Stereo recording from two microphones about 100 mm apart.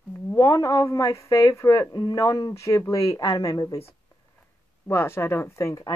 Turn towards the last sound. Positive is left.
turn(degrees=25)  # may be behind; listen again after turning